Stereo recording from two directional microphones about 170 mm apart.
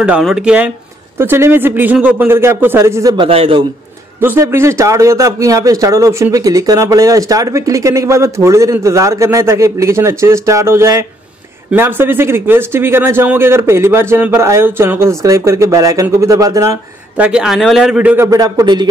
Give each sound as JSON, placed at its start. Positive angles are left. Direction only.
{"t": 0.0, "sound": "a man's voice", "side_deg": -5}
{"t": 3.3, "sound": "a man's voice", "side_deg": -35}
{"t": 4.2, "sound": "a man's voice", "side_deg": -10}
{"t": 17.2, "sound": "a man's voice", "side_deg": -5}